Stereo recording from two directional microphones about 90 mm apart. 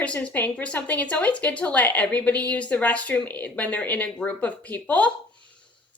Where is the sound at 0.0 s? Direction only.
15° left (ahead or behind).